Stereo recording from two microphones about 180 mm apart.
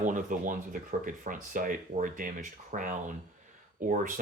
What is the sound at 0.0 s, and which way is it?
Speech, 45° right (ahead or behind).